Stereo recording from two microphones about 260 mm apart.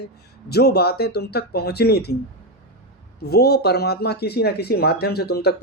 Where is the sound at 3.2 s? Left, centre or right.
Left.